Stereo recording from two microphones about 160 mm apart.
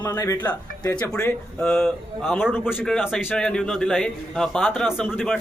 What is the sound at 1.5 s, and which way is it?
Speech, centre (ahead or behind).